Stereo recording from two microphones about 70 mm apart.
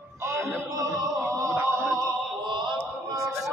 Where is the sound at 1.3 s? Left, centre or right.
Right.